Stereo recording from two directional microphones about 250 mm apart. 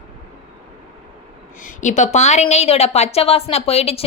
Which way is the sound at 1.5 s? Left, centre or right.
Left.